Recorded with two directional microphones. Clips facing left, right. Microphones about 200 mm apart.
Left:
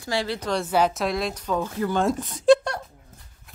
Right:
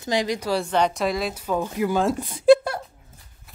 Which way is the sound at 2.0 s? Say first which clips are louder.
Right 1 dB; 10° right (ahead or behind).